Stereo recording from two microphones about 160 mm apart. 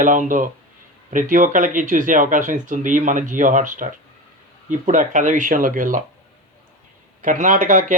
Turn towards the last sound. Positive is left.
turn(degrees=-50)  # may be behind; listen again after turning